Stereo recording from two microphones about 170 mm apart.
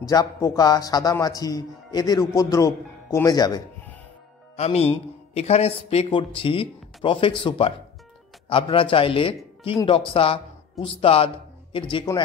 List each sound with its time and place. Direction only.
0.0 s speech: 20° left (ahead or behind)
4.6 s a man's voice: 40° left (ahead or behind)